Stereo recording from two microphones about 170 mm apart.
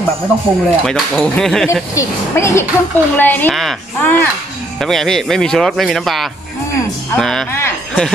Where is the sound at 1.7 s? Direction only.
15° left (ahead or behind).